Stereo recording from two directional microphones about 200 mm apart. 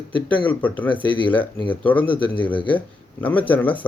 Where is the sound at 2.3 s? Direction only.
25° left (ahead or behind).